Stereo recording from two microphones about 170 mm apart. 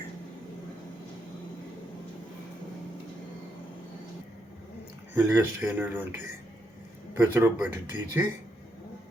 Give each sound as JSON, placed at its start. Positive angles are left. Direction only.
{"t": 5.1, "sound": "speech", "side_deg": -10}
{"t": 7.2, "sound": "speech", "side_deg": -10}